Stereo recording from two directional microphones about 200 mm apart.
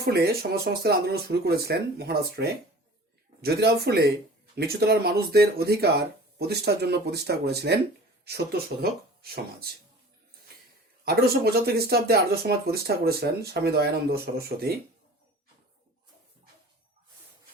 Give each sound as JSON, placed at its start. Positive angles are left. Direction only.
{"t": 0.0, "sound": "speech", "side_deg": -50}
{"t": 11.0, "sound": "speech", "side_deg": -50}